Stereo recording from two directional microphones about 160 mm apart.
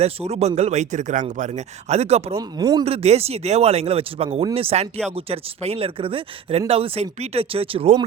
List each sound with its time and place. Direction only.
0.0 s speech: 40° right (ahead or behind)
2.3 s speech: 20° right (ahead or behind)
2.8 s speech: 40° right (ahead or behind)